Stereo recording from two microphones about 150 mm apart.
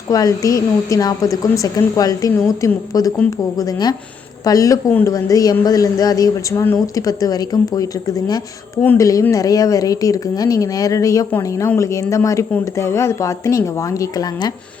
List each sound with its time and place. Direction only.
0.1 s speech: 25° left (ahead or behind)
4.9 s speech: 10° left (ahead or behind)
5.1 s speech: 25° left (ahead or behind)